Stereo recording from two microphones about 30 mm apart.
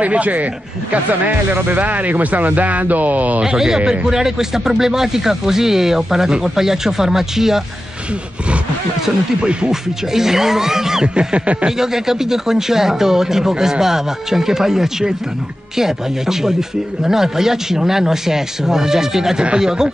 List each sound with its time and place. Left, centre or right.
0.0 s speech: right
1.2 s speech: right
3.4 s a man's voice: centre
9.4 s speech: right
9.7 s speech: centre
11.1 s speech: right
11.8 s speech: centre